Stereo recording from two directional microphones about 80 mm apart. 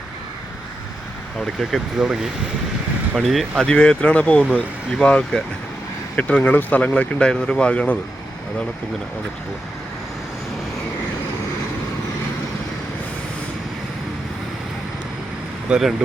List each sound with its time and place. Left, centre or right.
2.0 s speech: centre
3.7 s speech: centre
15.7 s speech: centre